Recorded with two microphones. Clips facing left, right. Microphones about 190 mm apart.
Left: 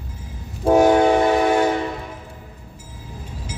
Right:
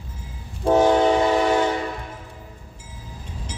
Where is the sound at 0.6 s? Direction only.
10° left (ahead or behind).